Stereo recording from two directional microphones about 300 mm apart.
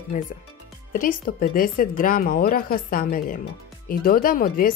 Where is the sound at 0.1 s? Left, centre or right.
Left.